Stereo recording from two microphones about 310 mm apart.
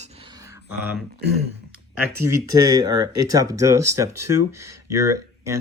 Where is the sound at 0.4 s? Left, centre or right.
Centre.